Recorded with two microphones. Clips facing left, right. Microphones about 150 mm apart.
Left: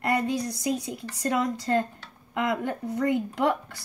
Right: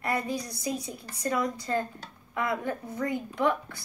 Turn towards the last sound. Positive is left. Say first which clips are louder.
# left 2 dB
turn(degrees=75)  # may be behind; listen again after turning